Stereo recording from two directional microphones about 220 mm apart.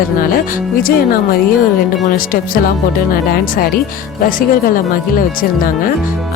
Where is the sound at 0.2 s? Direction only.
40° left (ahead or behind).